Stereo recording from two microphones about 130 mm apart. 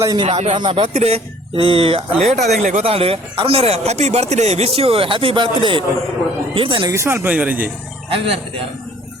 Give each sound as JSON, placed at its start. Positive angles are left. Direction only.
{"t": 0.0, "sound": "speech", "side_deg": -25}
{"t": 0.3, "sound": "speech", "side_deg": -55}
{"t": 0.5, "sound": "speech", "side_deg": -40}
{"t": 0.9, "sound": "speech", "side_deg": -50}
{"t": 2.8, "sound": "speech", "side_deg": -45}
{"t": 6.9, "sound": "speech", "side_deg": -20}
{"t": 8.1, "sound": "speech", "side_deg": -45}